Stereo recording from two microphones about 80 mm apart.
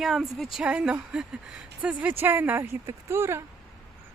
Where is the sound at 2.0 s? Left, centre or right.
Right.